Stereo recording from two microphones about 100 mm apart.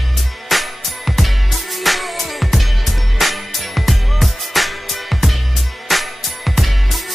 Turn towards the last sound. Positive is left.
turn(degrees=0)  # may be behind; listen again after turning